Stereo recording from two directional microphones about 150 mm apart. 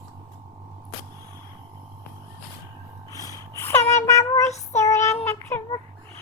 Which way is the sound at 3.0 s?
20° left (ahead or behind).